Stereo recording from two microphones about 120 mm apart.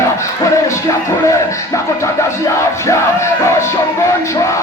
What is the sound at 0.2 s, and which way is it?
Music, 25° left (ahead or behind).